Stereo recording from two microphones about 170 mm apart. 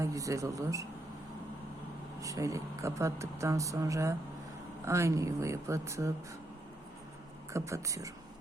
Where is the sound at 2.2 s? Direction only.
20° right (ahead or behind).